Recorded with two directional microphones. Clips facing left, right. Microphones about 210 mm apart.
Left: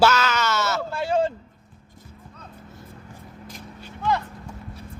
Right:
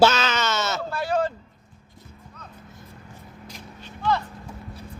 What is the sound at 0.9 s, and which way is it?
Speech, 25° left (ahead or behind).